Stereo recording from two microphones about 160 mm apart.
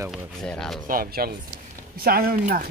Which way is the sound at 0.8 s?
65° right (ahead or behind).